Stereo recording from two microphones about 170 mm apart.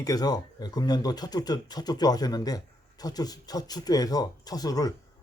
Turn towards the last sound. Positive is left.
turn(degrees=20)  # may be behind; listen again after turning